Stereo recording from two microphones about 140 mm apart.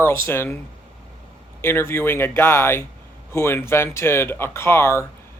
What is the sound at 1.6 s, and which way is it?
Speech, 15° left (ahead or behind).